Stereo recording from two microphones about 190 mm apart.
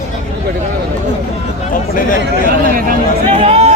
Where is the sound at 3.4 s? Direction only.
35° right (ahead or behind).